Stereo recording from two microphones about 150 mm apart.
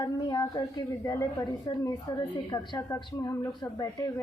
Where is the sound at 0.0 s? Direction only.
25° left (ahead or behind).